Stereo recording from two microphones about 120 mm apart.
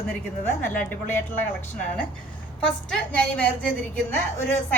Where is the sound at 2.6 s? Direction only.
10° left (ahead or behind).